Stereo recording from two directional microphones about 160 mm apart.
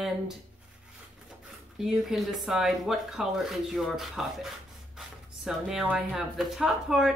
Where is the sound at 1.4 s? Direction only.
Centre (ahead or behind).